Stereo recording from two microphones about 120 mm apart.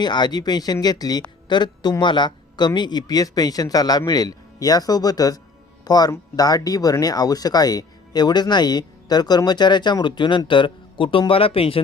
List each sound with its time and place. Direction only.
0.0 s speech: 35° left (ahead or behind)